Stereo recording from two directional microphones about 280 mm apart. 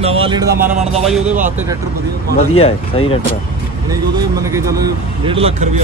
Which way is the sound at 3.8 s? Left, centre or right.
Centre.